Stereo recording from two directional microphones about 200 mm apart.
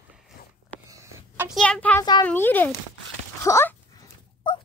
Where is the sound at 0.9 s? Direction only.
15° right (ahead or behind).